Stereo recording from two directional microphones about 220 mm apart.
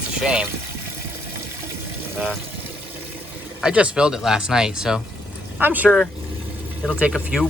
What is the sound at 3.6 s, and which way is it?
Speech, 5° right (ahead or behind).